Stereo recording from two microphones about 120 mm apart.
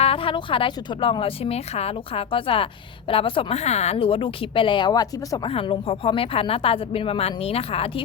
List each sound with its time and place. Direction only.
0.0 s a woman's voice: 50° left (ahead or behind); by 5.5 s 35° left (ahead or behind)
5.5 s a woman's voice: 45° left (ahead or behind)